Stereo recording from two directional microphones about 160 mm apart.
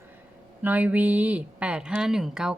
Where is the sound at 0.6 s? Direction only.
10° right (ahead or behind).